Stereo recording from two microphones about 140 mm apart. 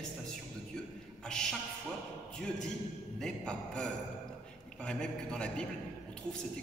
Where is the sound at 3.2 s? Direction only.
5° left (ahead or behind).